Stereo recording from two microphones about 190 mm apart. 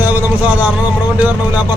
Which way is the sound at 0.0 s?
10° right (ahead or behind).